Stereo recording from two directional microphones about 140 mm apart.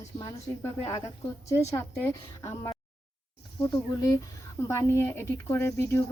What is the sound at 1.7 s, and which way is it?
A woman's voice, 20° left (ahead or behind).